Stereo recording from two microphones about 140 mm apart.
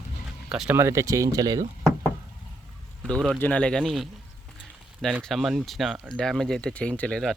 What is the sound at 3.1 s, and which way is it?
Speech, 5° left (ahead or behind).